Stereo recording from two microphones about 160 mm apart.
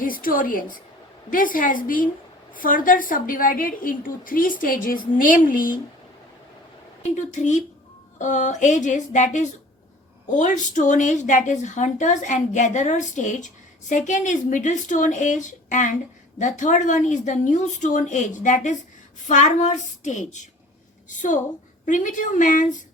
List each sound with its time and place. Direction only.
0.0 s a woman's voice: 60° left (ahead or behind)
7.2 s a woman's voice: 50° left (ahead or behind)